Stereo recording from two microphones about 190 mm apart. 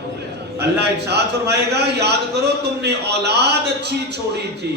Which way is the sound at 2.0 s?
60° right (ahead or behind).